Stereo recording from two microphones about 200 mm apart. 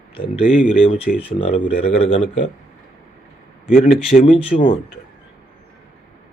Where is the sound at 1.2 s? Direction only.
30° left (ahead or behind).